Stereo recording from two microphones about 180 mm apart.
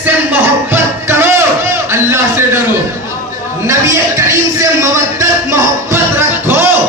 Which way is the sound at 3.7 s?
15° right (ahead or behind).